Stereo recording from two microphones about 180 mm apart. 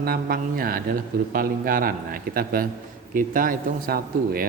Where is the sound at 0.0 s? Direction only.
55° right (ahead or behind).